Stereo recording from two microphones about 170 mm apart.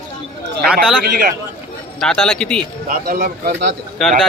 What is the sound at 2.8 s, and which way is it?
Speech, 55° right (ahead or behind).